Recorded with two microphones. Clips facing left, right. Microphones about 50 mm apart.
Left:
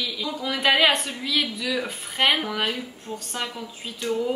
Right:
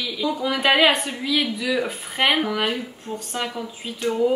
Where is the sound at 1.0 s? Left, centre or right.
Right.